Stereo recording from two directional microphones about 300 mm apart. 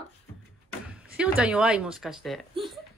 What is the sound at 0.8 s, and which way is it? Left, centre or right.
Speech, centre.